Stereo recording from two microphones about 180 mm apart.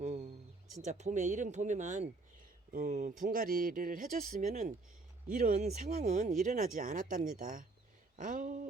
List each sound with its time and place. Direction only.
0.0 s a sound: 35° right (ahead or behind)
0.8 s speech: 40° right (ahead or behind)
5.5 s speech: 40° right (ahead or behind)